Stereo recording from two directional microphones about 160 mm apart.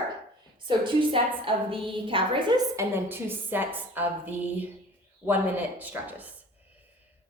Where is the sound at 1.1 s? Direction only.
35° right (ahead or behind).